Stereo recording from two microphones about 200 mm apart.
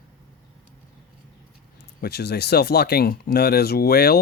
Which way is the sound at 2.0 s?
55° left (ahead or behind).